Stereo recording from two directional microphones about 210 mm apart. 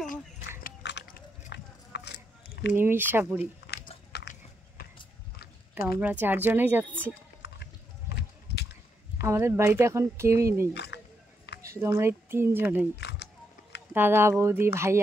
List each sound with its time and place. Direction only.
0.7 s a sound: 50° left (ahead or behind)
2.7 s speech: 10° right (ahead or behind)
3.6 s biting: 50° left (ahead or behind)
5.9 s speech: 10° right (ahead or behind)
7.4 s music: 50° left (ahead or behind)
8.1 s a sound: 55° left (ahead or behind)
9.2 s speech: 10° right (ahead or behind)
10.7 s speech: 55° left (ahead or behind)
11.6 s speech: 15° right (ahead or behind)
13.0 s a sound: 55° left (ahead or behind)
13.9 s speech: 10° right (ahead or behind)